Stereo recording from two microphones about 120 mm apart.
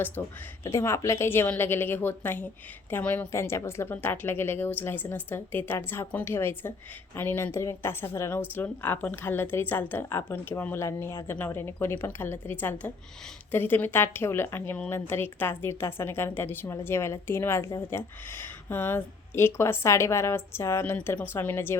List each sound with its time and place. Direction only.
0.2 s a woman's voice: 20° left (ahead or behind)